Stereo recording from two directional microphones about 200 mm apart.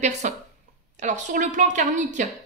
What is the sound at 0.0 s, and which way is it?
Speech, 35° right (ahead or behind).